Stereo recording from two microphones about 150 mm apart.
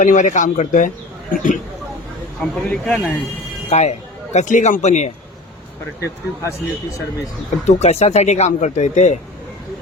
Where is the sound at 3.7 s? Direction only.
50° left (ahead or behind).